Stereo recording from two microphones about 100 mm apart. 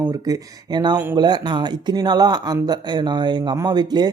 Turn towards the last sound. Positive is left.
turn(degrees=-45)  # may be behind; listen again after turning